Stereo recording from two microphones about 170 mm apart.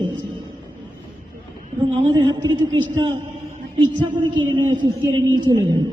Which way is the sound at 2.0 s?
25° right (ahead or behind).